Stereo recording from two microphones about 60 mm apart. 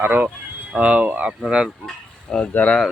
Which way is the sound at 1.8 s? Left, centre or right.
Centre.